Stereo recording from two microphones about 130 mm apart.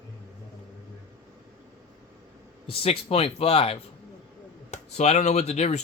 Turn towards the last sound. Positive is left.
turn(degrees=60)  # may be behind; listen again after turning